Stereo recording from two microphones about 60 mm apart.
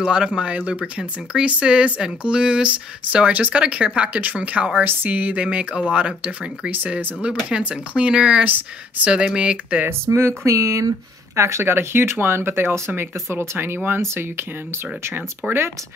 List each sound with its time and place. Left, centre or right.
0.0 s speech: centre
6.7 s speech: right
7.4 s speech: centre
8.5 s speech: right
9.1 s speech: centre
10.0 s speech: right
15.4 s speech: right